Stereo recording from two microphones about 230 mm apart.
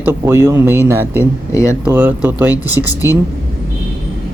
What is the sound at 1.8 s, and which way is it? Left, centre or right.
Speech, centre.